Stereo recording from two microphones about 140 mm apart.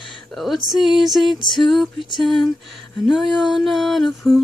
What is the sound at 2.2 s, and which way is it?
Female singing, centre (ahead or behind).